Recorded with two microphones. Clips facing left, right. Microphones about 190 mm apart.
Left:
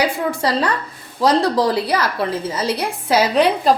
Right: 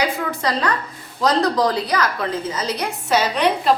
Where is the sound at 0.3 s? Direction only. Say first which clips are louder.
Left 3 dB; 30° left (ahead or behind).